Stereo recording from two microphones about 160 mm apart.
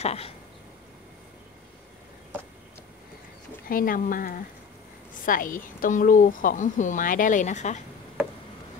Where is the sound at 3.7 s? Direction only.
60° left (ahead or behind).